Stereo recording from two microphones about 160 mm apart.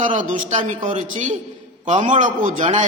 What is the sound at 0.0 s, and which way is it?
A man's voice, 50° right (ahead or behind).